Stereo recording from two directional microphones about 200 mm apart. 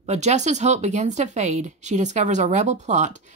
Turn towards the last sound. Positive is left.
turn(degrees=-35)  # may be behind; listen again after turning